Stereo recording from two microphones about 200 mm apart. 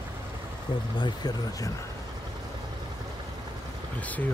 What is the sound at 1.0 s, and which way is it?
Speech, 20° left (ahead or behind).